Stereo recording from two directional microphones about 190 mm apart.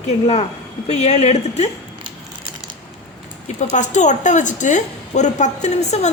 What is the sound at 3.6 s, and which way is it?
A woman's voice, 40° left (ahead or behind).